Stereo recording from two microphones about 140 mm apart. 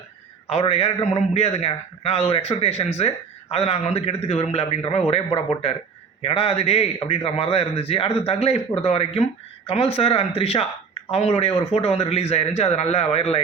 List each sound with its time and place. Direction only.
0.4 s a man's voice: 45° left (ahead or behind)